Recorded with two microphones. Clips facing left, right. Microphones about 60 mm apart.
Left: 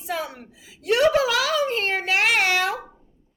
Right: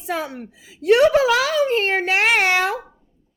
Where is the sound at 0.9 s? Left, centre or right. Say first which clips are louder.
Right 5 dB; right.